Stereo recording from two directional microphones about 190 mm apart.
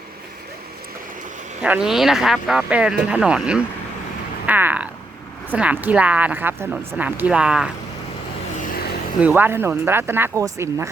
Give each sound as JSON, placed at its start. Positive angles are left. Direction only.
{"t": 1.6, "sound": "speech", "side_deg": -5}
{"t": 9.2, "sound": "speech", "side_deg": -10}